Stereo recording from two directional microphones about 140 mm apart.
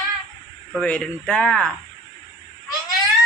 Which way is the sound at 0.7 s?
10° left (ahead or behind).